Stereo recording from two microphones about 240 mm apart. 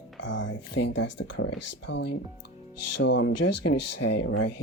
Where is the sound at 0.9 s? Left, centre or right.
Left.